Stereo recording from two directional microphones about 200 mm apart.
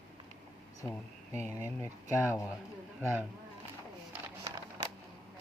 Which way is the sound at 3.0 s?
10° right (ahead or behind).